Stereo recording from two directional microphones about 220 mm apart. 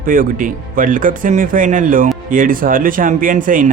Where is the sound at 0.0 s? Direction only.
40° right (ahead or behind).